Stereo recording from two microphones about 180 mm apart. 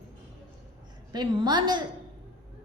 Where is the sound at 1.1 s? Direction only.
25° right (ahead or behind).